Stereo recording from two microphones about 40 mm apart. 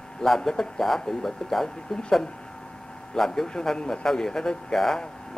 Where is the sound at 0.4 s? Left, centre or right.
Centre.